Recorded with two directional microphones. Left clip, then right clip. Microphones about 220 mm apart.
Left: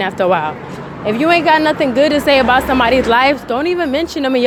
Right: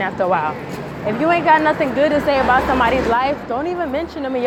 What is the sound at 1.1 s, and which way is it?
A woman's voice, 40° left (ahead or behind).